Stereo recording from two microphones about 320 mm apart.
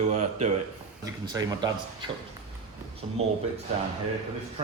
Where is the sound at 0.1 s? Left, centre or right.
Right.